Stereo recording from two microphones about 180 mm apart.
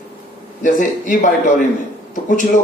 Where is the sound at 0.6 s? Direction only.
45° left (ahead or behind).